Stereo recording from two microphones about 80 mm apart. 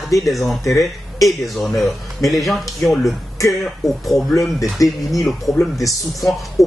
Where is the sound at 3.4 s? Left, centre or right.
Left.